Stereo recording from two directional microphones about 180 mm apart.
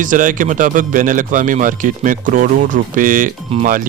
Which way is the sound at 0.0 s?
45° right (ahead or behind).